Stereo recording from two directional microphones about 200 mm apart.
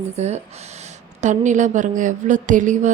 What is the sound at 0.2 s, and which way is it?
Speech, 35° right (ahead or behind).